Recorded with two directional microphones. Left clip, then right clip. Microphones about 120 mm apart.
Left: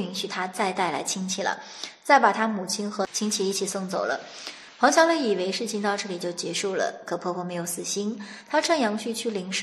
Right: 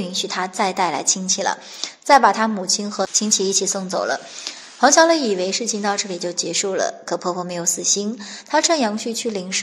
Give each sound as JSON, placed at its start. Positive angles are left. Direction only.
{"t": 0.1, "sound": "a woman's voice", "side_deg": -35}